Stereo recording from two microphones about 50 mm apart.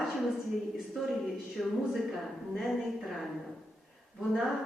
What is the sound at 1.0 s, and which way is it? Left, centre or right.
A woman's voice, centre.